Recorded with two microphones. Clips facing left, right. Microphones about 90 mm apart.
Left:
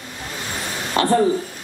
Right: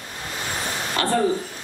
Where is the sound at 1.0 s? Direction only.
25° left (ahead or behind).